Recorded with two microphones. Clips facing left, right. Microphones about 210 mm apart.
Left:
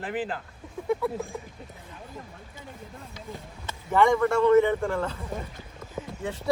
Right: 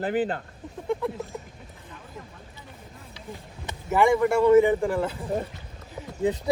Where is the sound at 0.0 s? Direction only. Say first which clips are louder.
Right 5 dB; 35° right (ahead or behind).